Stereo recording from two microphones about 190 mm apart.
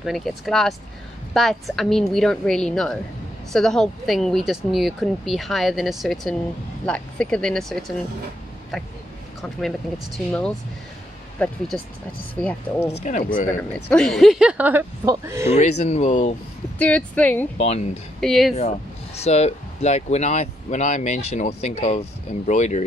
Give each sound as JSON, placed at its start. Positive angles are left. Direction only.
{"t": 0.0, "sound": "speech", "side_deg": 0}
{"t": 9.4, "sound": "speech", "side_deg": 0}
{"t": 13.0, "sound": "speech", "side_deg": 40}
{"t": 13.8, "sound": "speech", "side_deg": 5}
{"t": 15.5, "sound": "speech", "side_deg": 35}
{"t": 16.7, "sound": "speech", "side_deg": 10}
{"t": 17.6, "sound": "speech", "side_deg": 35}
{"t": 18.2, "sound": "speech", "side_deg": 0}
{"t": 18.6, "sound": "speech", "side_deg": 35}